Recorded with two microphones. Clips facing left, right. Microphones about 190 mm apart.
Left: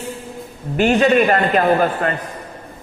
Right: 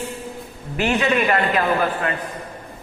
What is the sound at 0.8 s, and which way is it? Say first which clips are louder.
A man's voice: left 6 dB; 40° left (ahead or behind).